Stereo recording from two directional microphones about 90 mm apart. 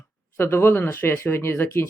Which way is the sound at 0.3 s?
25° left (ahead or behind).